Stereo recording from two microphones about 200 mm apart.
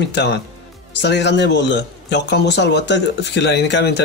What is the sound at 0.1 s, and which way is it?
Speech, 60° left (ahead or behind).